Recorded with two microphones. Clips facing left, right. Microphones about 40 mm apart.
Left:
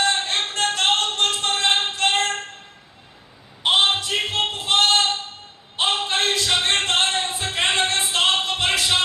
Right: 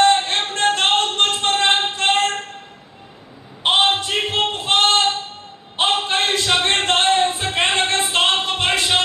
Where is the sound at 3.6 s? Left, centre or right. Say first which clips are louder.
Right 2 dB; right.